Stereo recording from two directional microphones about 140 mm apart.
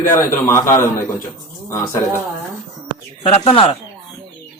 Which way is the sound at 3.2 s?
45° left (ahead or behind).